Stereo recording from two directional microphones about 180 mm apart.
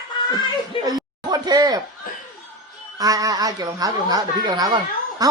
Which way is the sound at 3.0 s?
20° right (ahead or behind).